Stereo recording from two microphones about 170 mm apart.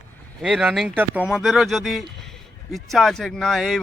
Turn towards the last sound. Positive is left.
turn(degrees=0)  # may be behind; listen again after turning